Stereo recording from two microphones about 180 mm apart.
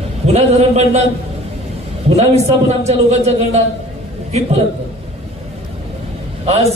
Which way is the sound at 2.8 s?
40° right (ahead or behind).